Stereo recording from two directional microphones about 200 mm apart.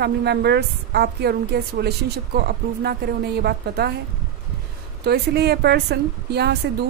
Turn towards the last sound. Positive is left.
turn(degrees=-55)  # may be behind; listen again after turning